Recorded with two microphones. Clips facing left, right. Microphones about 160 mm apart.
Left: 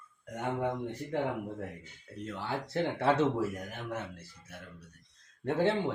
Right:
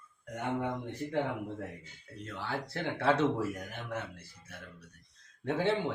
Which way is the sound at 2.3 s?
15° left (ahead or behind).